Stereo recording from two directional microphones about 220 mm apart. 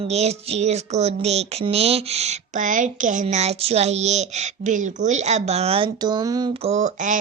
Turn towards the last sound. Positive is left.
turn(degrees=-35)  # may be behind; listen again after turning